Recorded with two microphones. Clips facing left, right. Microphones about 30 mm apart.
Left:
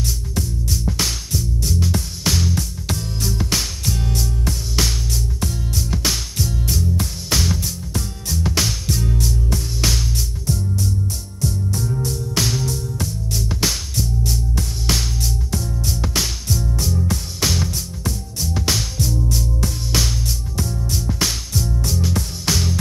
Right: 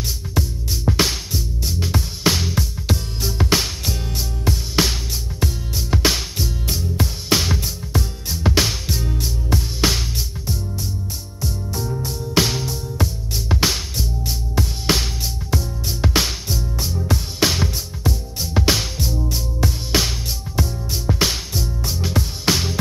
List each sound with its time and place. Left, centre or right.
0.3 s music: centre